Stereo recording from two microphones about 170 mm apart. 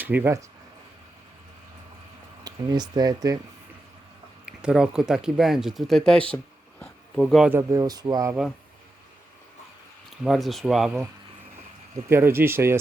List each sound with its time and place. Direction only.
0.0 s speech: 10° right (ahead or behind)
2.4 s speech: 25° right (ahead or behind)
4.4 s speech: 5° right (ahead or behind)
6.3 s a sound: 5° left (ahead or behind)
7.5 s speech: 20° right (ahead or behind)
8.3 s speech: 5° right (ahead or behind)
10.2 s speech: centre (ahead or behind)
12.0 s speech: 15° right (ahead or behind)